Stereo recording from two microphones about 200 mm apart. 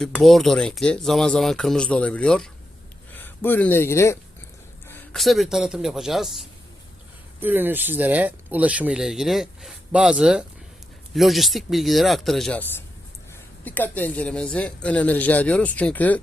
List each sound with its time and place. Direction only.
0.0 s speech: centre (ahead or behind)